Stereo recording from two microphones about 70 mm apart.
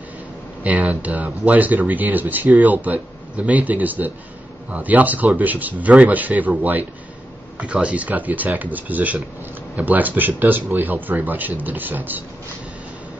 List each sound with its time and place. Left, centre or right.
0.7 s speech: right